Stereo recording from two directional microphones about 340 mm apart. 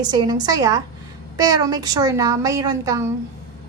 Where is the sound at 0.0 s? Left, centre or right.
Centre.